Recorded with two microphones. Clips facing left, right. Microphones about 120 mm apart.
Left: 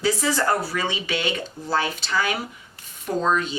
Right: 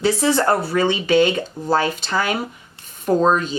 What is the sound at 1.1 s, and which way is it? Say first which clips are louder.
Speech: right 10 dB; 45° right (ahead or behind).